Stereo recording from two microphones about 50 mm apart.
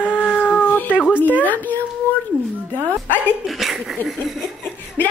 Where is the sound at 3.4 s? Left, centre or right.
Centre.